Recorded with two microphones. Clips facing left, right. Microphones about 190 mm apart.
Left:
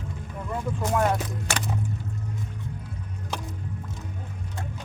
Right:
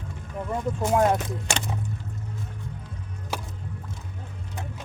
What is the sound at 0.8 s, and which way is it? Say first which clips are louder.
Speech: right 3 dB; 25° right (ahead or behind).